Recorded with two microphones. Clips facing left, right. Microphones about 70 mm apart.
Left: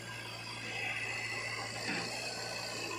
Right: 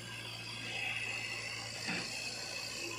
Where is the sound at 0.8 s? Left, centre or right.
Left.